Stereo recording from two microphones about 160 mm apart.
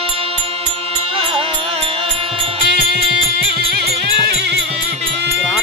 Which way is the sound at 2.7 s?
75° right (ahead or behind).